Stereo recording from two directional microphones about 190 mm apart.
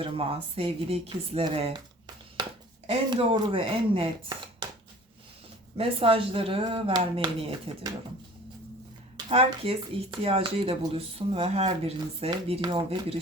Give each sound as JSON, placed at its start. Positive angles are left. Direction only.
{"t": 0.0, "sound": "speech", "side_deg": -30}
{"t": 5.7, "sound": "speech", "side_deg": -30}
{"t": 9.1, "sound": "speech", "side_deg": -30}